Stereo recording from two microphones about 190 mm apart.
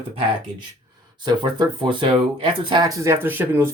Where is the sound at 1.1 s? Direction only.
25° right (ahead or behind).